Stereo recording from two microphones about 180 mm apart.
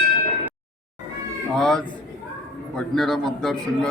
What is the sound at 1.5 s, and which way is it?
Music, 5° left (ahead or behind).